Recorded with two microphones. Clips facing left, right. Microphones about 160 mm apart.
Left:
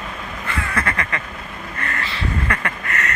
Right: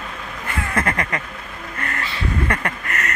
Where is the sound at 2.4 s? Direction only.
40° right (ahead or behind).